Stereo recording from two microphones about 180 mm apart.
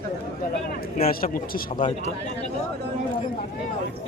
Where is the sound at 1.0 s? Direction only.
55° left (ahead or behind).